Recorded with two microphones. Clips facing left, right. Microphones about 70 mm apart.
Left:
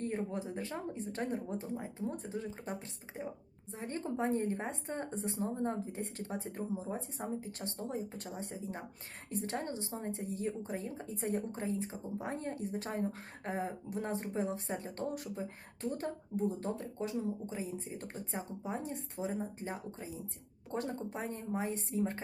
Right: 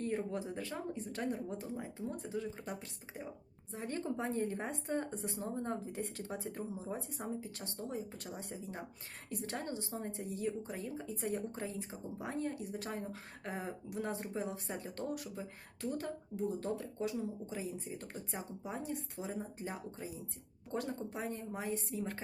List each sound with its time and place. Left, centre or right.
0.5 s a woman's voice: left